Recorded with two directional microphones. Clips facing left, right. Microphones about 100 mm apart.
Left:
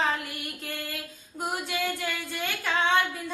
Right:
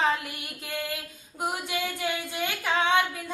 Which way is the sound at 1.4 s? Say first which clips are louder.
Even; 15° right (ahead or behind).